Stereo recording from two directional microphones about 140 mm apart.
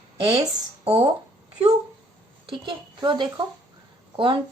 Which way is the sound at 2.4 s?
35° right (ahead or behind).